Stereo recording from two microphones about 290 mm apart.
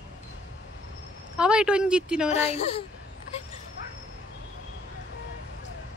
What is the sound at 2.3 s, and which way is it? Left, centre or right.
Speech, left.